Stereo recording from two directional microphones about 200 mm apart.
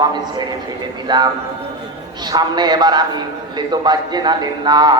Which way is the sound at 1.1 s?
20° right (ahead or behind).